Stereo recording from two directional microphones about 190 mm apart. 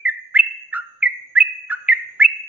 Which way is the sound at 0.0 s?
10° right (ahead or behind).